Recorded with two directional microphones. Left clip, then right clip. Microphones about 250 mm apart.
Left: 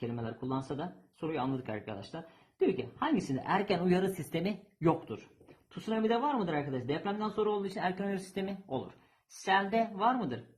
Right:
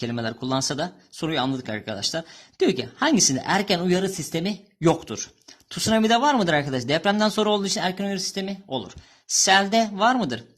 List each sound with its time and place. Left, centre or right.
0.0 s a woman's voice: right
4.9 s speech: right